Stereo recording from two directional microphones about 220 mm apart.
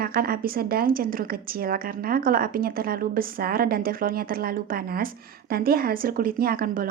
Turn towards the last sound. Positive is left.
turn(degrees=-40)  # may be behind; listen again after turning